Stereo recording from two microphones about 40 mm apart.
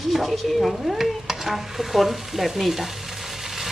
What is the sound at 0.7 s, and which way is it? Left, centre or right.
Stir, centre.